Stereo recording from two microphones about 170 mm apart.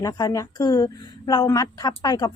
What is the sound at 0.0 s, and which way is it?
A woman's voice, 20° left (ahead or behind).